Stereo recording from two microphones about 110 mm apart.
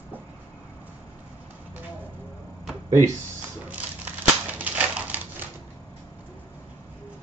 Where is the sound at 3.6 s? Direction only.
15° right (ahead or behind).